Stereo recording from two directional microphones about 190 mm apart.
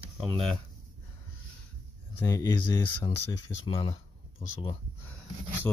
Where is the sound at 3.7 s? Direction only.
30° left (ahead or behind).